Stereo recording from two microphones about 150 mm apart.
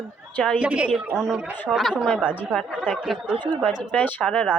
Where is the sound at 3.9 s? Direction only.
10° left (ahead or behind).